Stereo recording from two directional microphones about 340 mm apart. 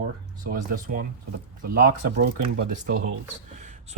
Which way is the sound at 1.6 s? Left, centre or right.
Right.